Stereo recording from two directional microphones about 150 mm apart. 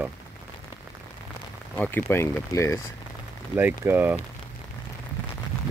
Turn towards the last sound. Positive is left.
turn(degrees=-15)  # may be behind; listen again after turning